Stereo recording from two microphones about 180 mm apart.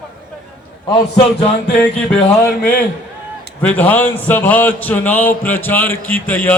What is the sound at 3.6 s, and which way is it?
Speech, 10° left (ahead or behind).